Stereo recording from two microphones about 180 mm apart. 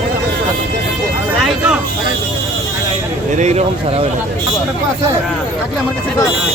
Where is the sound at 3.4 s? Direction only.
40° right (ahead or behind).